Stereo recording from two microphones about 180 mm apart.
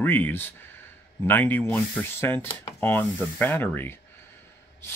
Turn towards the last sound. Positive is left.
turn(degrees=10)  # may be behind; listen again after turning